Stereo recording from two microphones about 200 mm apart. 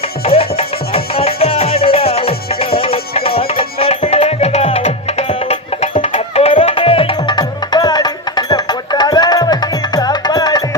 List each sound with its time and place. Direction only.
0.3 s music: 30° left (ahead or behind)